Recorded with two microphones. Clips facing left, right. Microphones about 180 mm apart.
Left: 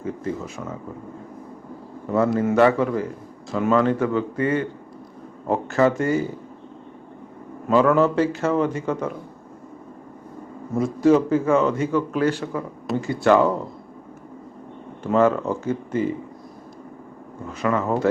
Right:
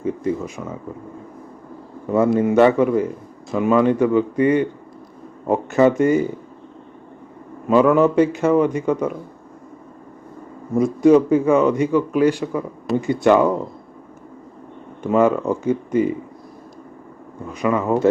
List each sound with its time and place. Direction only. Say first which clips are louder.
0.0 s a sound: right 5 dB; 15° right (ahead or behind)
2.1 s a man's voice: right 3 dB; 15° right (ahead or behind)
7.7 s a man's voice: right 3 dB; 15° right (ahead or behind)
10.8 s a man's voice: right 4 dB; 15° right (ahead or behind)
15.0 s a man's voice: right 2 dB; 15° right (ahead or behind)
17.5 s a man's voice: right 3 dB; 15° right (ahead or behind)